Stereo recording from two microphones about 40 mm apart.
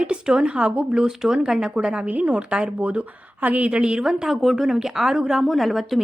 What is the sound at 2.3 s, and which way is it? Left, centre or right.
A woman's voice, right.